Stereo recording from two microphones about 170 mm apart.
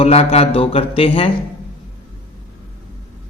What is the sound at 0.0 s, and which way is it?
A man's voice, 35° left (ahead or behind).